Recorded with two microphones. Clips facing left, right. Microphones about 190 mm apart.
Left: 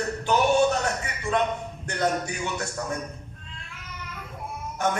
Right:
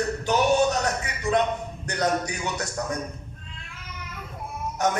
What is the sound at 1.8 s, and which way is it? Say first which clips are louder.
Speech: right 1 dB; 40° right (ahead or behind).